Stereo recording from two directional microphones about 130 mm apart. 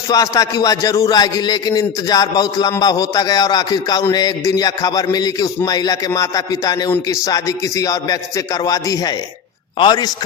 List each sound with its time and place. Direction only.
0.1 s a man's voice: 30° left (ahead or behind)